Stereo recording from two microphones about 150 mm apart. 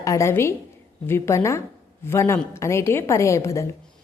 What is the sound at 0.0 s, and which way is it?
A woman's voice, 20° left (ahead or behind).